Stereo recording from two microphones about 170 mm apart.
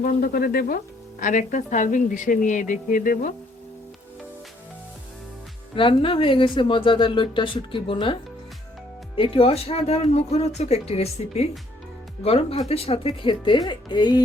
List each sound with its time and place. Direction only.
0.0 s speech: 60° left (ahead or behind)
1.2 s a woman's voice: 50° left (ahead or behind)
5.7 s speech: 30° left (ahead or behind)